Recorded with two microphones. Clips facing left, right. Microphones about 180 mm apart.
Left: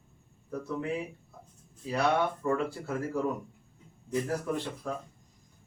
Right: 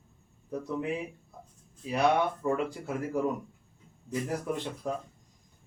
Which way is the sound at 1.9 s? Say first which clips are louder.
Right 2 dB; 15° right (ahead or behind).